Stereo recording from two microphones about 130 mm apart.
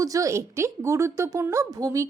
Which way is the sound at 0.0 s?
25° right (ahead or behind).